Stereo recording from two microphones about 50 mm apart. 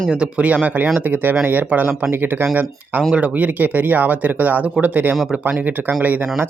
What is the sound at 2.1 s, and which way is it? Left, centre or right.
Speech, right.